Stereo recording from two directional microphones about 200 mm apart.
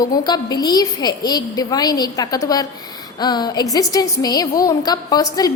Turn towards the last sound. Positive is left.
turn(degrees=20)  # may be behind; listen again after turning